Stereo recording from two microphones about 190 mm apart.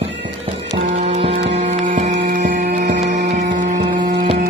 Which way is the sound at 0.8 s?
35° right (ahead or behind).